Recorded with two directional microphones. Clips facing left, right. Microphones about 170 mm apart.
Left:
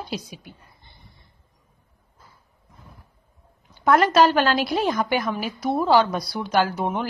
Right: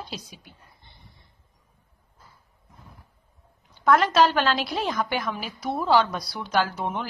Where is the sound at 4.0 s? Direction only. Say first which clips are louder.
Left 3 dB; 5° left (ahead or behind).